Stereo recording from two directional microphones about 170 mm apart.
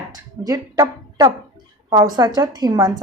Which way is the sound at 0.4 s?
20° right (ahead or behind).